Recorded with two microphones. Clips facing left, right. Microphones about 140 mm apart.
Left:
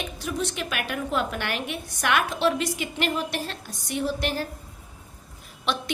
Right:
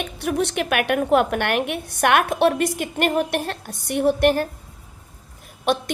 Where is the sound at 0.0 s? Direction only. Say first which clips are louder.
Right 6 dB; 60° right (ahead or behind).